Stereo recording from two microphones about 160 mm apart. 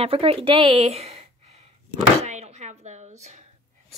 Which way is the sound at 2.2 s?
45° right (ahead or behind).